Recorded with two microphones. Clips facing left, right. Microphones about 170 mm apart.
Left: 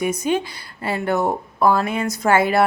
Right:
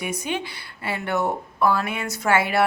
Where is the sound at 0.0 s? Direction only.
45° left (ahead or behind).